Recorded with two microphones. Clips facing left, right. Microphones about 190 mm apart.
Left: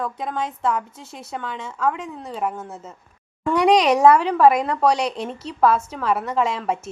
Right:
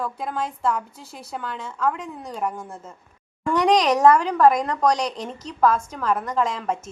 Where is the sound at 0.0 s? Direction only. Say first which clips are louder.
Left 1 dB; 5° right (ahead or behind).